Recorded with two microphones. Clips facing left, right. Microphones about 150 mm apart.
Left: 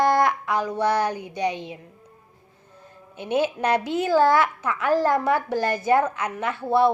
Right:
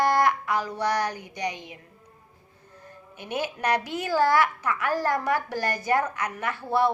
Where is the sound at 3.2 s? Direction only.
20° left (ahead or behind).